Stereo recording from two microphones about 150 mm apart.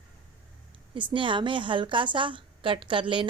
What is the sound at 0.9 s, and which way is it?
A woman's voice, 35° right (ahead or behind).